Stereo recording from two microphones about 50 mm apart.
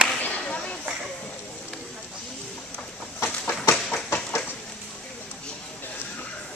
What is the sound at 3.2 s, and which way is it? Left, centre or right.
Chicken, left.